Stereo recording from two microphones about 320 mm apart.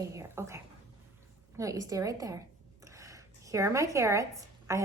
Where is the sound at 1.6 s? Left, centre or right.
Centre.